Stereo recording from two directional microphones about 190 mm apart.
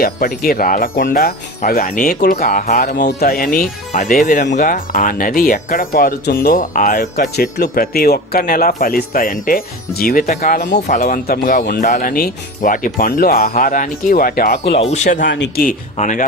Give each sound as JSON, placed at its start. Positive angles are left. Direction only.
{"t": 0.0, "sound": "speech", "side_deg": 55}
{"t": 2.9, "sound": "speech", "side_deg": 60}
{"t": 7.3, "sound": "speech", "side_deg": 55}
{"t": 11.8, "sound": "speech", "side_deg": 40}
{"t": 14.7, "sound": "speech", "side_deg": 35}
{"t": 15.3, "sound": "speech", "side_deg": 70}
{"t": 15.6, "sound": "speech", "side_deg": 40}